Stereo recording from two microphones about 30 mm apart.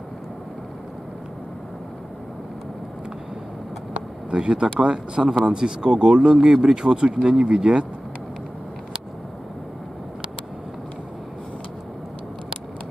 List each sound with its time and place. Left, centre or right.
4.3 s speech: right